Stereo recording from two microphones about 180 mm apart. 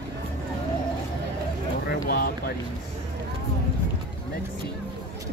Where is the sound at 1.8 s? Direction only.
60° left (ahead or behind).